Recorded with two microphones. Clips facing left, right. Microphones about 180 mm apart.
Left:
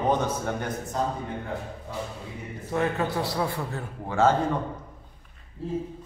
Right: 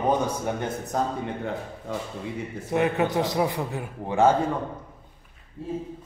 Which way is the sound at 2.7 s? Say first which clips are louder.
Right 3 dB; 15° right (ahead or behind).